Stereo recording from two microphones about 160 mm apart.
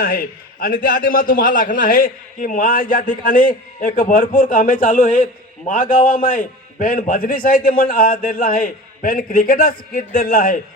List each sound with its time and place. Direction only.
0.0 s a man's voice: 65° left (ahead or behind)